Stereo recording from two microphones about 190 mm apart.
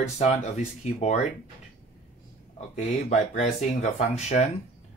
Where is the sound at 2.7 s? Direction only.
40° left (ahead or behind).